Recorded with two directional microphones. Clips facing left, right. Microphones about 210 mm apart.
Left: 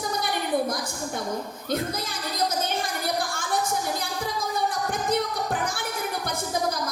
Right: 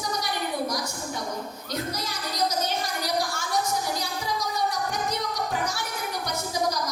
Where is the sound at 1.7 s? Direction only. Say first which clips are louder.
Left 4 dB; 50° left (ahead or behind).